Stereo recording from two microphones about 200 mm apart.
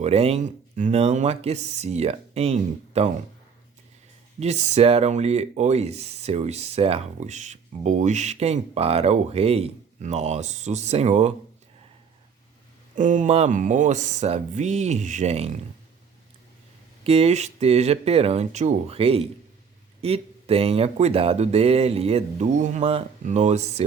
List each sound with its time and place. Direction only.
0.0 s speech: 30° right (ahead or behind)
4.4 s speech: 35° right (ahead or behind)
13.0 s speech: 40° right (ahead or behind)
17.0 s speech: 30° right (ahead or behind)